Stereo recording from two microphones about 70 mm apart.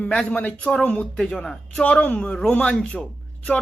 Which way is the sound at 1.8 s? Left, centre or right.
Left.